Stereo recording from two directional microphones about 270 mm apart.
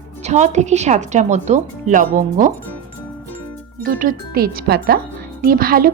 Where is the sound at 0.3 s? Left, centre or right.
Right.